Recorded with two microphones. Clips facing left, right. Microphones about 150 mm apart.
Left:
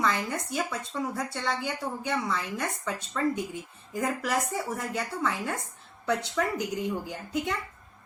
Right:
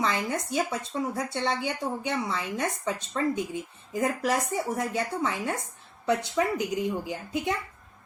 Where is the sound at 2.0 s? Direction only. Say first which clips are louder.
Left 3 dB; 25° right (ahead or behind).